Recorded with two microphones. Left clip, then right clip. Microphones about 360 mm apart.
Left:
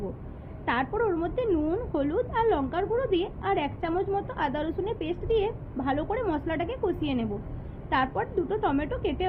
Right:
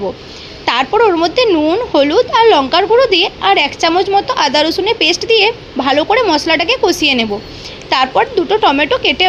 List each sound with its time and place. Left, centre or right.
0.6 s a woman's voice: centre